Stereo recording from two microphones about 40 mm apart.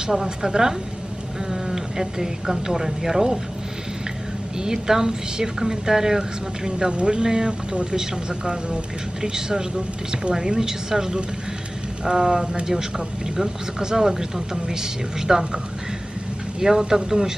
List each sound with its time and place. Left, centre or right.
0.0 s speech: centre
4.6 s speech: centre
9.2 s speech: centre